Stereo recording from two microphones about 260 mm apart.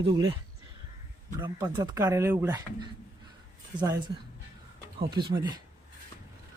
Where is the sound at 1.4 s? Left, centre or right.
Centre.